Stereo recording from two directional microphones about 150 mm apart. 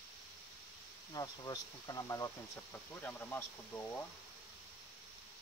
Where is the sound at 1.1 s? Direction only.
25° left (ahead or behind).